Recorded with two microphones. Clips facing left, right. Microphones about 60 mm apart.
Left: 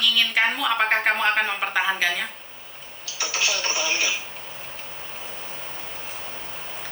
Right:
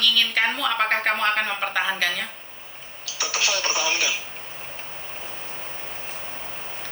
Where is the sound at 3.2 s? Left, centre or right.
Right.